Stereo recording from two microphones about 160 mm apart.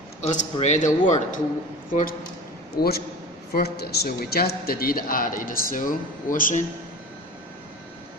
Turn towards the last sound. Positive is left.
turn(degrees=55)  # may be behind; listen again after turning